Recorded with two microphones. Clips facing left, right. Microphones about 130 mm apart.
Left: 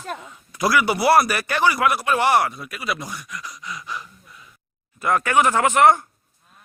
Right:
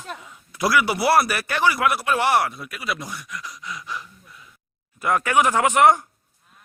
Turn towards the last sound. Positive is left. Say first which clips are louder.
# left 1 dB
turn(degrees=-15)  # may be behind; listen again after turning